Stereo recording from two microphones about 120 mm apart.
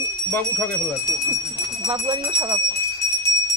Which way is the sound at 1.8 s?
40° right (ahead or behind).